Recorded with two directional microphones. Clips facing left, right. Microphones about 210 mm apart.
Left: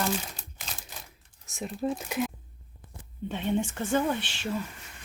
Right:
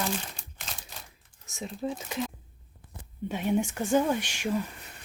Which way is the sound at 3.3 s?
10° right (ahead or behind).